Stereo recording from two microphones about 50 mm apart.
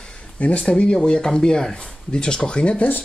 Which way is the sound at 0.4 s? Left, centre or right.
Left.